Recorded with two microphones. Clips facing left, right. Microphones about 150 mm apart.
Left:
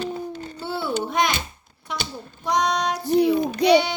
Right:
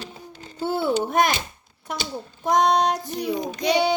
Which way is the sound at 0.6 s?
45° right (ahead or behind).